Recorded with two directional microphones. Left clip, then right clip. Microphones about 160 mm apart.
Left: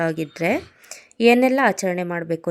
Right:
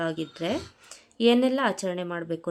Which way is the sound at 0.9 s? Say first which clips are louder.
Left 6 dB; 25° left (ahead or behind).